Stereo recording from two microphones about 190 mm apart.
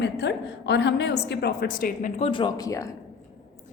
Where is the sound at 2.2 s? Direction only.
25° left (ahead or behind).